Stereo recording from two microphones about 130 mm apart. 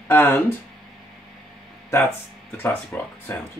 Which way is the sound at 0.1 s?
15° left (ahead or behind).